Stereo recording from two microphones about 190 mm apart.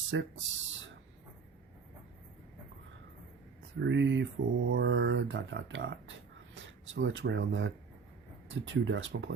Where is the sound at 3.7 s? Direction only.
70° right (ahead or behind).